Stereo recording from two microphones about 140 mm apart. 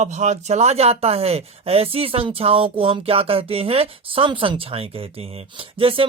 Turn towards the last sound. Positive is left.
turn(degrees=-40)  # may be behind; listen again after turning